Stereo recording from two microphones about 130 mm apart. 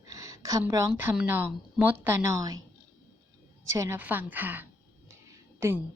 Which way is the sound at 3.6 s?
25° right (ahead or behind).